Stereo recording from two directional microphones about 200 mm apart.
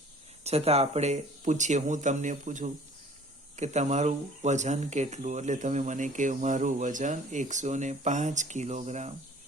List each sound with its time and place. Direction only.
0.4 s speech: 30° right (ahead or behind)